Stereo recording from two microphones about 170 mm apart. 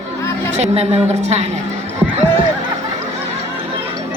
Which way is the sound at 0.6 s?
40° right (ahead or behind).